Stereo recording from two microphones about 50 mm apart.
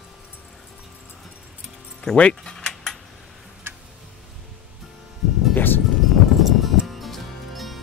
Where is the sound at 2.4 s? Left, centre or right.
Centre.